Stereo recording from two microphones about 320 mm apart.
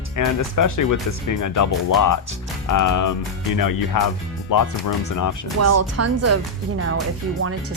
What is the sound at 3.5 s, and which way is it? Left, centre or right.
Speech, left.